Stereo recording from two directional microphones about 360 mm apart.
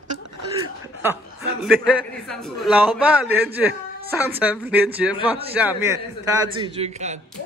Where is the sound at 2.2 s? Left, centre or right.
Centre.